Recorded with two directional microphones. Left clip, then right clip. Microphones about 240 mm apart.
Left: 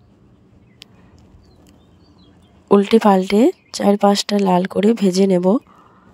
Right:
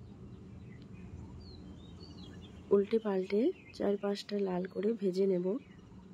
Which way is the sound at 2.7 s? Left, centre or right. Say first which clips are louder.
Left 17 dB; left.